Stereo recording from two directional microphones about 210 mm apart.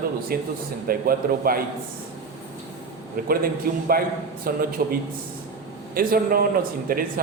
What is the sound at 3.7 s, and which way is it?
A man's voice, 45° right (ahead or behind).